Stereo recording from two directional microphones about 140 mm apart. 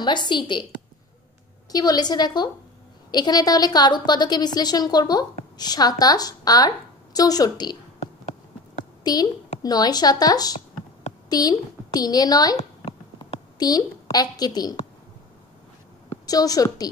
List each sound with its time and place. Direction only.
0.0 s a woman's voice: 30° left (ahead or behind)
1.7 s a woman's voice: 25° left (ahead or behind)
9.0 s a woman's voice: 30° left (ahead or behind)
16.3 s a woman's voice: 25° left (ahead or behind)